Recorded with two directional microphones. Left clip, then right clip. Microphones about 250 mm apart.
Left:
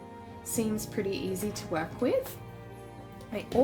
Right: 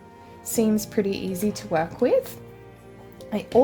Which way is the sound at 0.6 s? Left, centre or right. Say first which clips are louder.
Right 9 dB; right.